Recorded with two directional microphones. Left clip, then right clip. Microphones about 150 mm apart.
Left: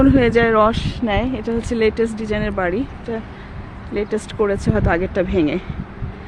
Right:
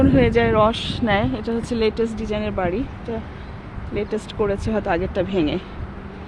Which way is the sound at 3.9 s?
20° left (ahead or behind).